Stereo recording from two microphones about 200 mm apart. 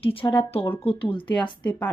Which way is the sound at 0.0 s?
25° left (ahead or behind).